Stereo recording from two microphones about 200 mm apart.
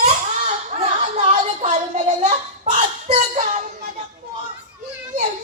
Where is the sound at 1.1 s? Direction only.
35° right (ahead or behind).